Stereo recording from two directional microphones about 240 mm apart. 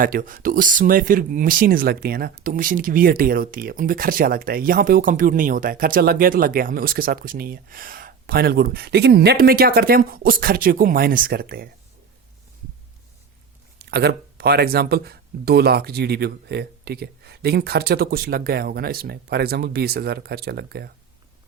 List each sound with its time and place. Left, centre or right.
0.0 s speech: right
13.7 s speech: right